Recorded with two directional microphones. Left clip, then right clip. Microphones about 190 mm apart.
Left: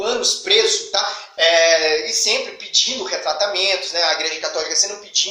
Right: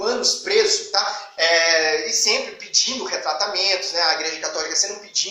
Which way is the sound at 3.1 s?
25° right (ahead or behind).